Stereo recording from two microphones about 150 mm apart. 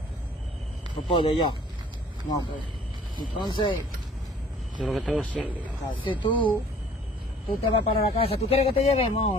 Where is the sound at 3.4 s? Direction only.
30° left (ahead or behind).